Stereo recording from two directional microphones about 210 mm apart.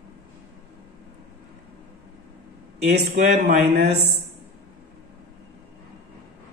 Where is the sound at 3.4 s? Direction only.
50° right (ahead or behind).